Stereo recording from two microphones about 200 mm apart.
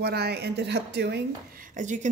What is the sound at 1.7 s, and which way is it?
Speech, 35° right (ahead or behind).